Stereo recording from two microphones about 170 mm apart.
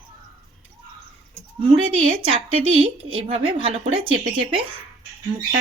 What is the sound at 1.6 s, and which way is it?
A woman's voice, 30° right (ahead or behind).